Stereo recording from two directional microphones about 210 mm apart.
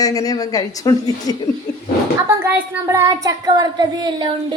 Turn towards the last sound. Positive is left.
turn(degrees=-20)  # may be behind; listen again after turning